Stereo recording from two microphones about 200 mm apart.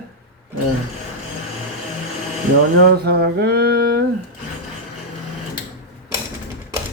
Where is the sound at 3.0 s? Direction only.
55° right (ahead or behind).